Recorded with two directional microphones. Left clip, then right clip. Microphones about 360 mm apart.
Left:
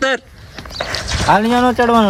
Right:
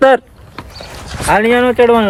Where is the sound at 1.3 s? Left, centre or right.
Centre.